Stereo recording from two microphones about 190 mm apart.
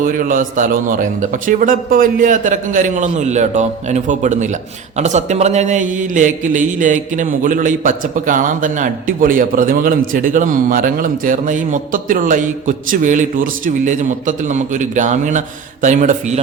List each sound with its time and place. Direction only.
0.1 s speech: 45° right (ahead or behind)